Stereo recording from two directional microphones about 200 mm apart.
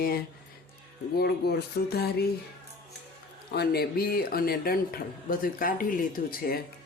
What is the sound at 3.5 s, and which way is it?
Speech, 55° left (ahead or behind).